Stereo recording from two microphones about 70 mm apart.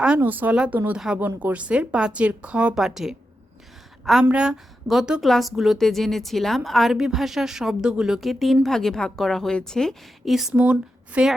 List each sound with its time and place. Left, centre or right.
0.2 s speech: right
0.9 s speech: centre
1.2 s speech: right
2.7 s a woman's voice: centre
10.6 s speech: centre